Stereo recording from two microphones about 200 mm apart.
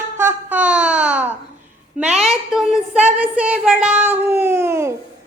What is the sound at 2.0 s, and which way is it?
Speech, 30° right (ahead or behind).